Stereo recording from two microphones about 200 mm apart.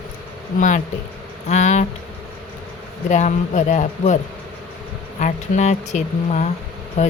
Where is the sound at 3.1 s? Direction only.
40° left (ahead or behind).